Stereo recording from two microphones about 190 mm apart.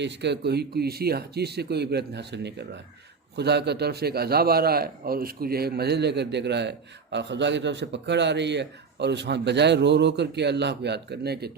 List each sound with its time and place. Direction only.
0.0 s a man's voice: 65° right (ahead or behind)